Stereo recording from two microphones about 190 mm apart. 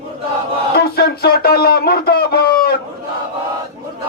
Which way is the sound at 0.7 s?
55° left (ahead or behind).